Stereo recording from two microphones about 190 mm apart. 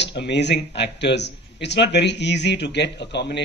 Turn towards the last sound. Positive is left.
turn(degrees=65)  # may be behind; listen again after turning